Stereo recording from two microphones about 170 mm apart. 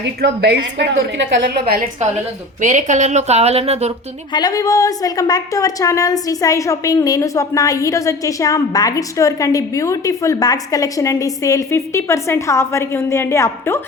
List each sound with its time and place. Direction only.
0.2 s a woman's voice: 75° right (ahead or behind)
1.5 s a woman's voice: 60° right (ahead or behind)
2.6 s speech: 45° right (ahead or behind)
4.3 s a woman's voice: 25° left (ahead or behind)